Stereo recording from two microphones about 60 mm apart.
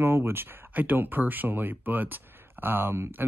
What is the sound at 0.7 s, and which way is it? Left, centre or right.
Speech, right.